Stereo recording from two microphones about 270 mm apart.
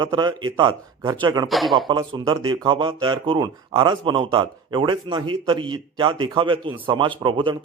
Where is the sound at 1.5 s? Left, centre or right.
Centre.